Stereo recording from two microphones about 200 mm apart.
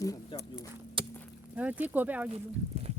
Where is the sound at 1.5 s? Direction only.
10° right (ahead or behind).